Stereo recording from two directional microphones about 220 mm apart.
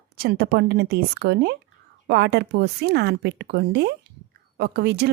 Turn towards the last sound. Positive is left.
turn(degrees=-50)  # may be behind; listen again after turning